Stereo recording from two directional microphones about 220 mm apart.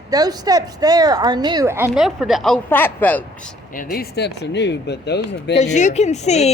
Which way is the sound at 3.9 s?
45° left (ahead or behind).